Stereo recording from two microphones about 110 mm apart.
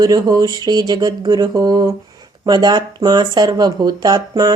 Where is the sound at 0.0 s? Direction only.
35° right (ahead or behind).